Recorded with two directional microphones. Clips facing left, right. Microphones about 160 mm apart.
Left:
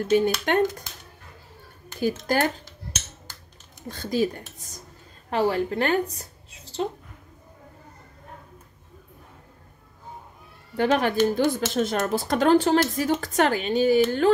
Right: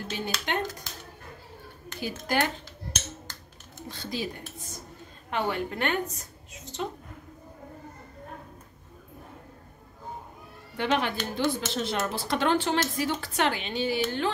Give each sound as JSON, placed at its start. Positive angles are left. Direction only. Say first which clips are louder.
{"t": 0.1, "sound": "a woman's voice", "louder": "left 11 dB", "side_deg": 50}
{"t": 2.0, "sound": "speech", "louder": "left 5 dB", "side_deg": 45}
{"t": 3.9, "sound": "a woman's voice", "louder": "left 9 dB", "side_deg": 45}
{"t": 5.3, "sound": "a woman's voice", "louder": "left 6 dB", "side_deg": 35}
{"t": 10.8, "sound": "a woman's voice", "louder": "left 7 dB", "side_deg": 40}